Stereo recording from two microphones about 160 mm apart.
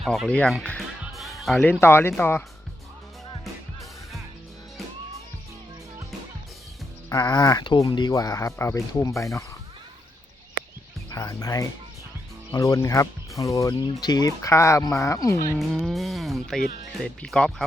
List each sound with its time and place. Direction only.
0.0 s speech: centre (ahead or behind)
1.0 s music: centre (ahead or behind)
1.6 s speech: 15° left (ahead or behind)
7.1 s speech: 25° left (ahead or behind)
11.1 s speech: 20° left (ahead or behind)
15.5 s speech: centre (ahead or behind)